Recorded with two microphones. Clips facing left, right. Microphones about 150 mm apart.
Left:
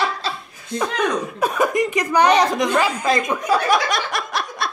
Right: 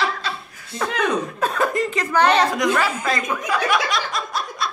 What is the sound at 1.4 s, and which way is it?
Speech, 15° left (ahead or behind).